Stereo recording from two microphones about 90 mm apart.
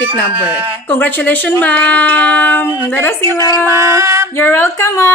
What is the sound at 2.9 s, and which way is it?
Speech, 25° left (ahead or behind).